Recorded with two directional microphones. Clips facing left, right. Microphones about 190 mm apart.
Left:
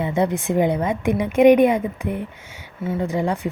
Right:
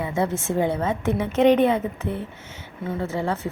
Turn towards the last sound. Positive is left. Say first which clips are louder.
# left 3 dB
turn(degrees=15)  # may be behind; listen again after turning